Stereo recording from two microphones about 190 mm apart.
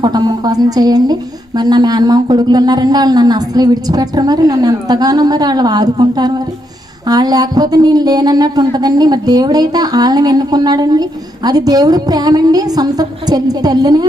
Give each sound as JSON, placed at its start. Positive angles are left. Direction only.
{"t": 0.0, "sound": "a woman's voice", "side_deg": -20}